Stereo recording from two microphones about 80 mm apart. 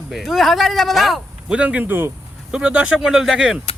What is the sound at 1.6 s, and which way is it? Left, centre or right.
Speech, centre.